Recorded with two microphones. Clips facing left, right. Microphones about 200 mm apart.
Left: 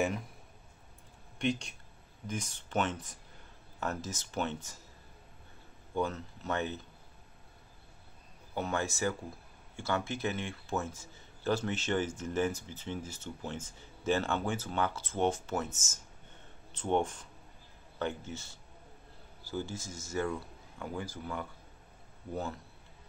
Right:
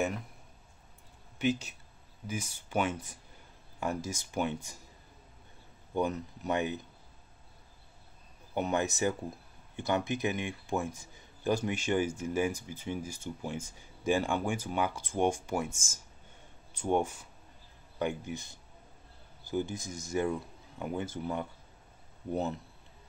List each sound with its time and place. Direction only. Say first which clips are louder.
1.4 s speech: right 2 dB; 5° right (ahead or behind)
5.9 s speech: right 2 dB; 15° right (ahead or behind)
8.5 s speech: right 3 dB; 20° right (ahead or behind)